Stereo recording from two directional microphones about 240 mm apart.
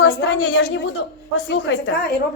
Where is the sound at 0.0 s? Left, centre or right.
Left.